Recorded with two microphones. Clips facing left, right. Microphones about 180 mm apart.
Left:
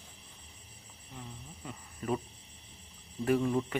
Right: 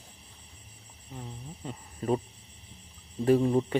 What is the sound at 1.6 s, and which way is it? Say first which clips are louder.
Speech: right 5 dB; 30° right (ahead or behind).